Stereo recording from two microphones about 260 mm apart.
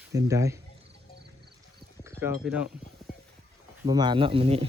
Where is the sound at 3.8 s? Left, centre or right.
Centre.